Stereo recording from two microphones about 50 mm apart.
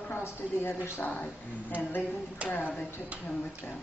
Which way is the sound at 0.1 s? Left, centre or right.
Left.